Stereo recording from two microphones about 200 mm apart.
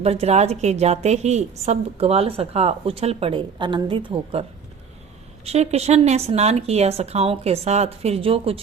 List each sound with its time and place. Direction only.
0.0 s a woman's voice: 30° right (ahead or behind)
5.5 s a woman's voice: 30° right (ahead or behind)